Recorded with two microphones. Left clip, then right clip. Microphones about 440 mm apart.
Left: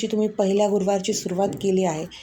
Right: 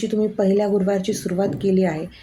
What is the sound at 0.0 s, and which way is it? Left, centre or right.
A woman's voice, right.